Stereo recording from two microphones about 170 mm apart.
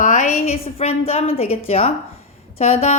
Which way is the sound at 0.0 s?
45° left (ahead or behind).